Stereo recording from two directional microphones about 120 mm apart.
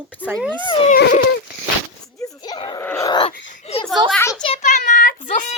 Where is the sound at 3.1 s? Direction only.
40° left (ahead or behind).